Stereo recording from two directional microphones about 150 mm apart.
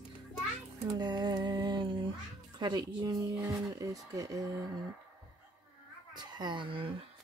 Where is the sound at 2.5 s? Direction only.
25° right (ahead or behind).